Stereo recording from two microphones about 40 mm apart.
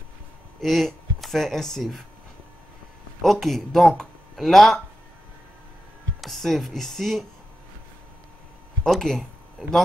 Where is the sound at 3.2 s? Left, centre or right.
Centre.